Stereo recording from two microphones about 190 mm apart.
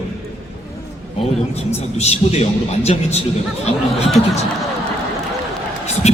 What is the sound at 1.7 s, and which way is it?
A man's voice, 35° left (ahead or behind).